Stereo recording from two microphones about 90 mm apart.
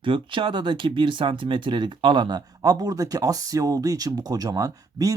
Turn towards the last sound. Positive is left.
turn(degrees=-40)  # may be behind; listen again after turning